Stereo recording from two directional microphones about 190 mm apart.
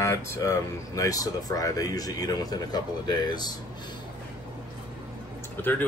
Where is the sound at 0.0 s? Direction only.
15° left (ahead or behind).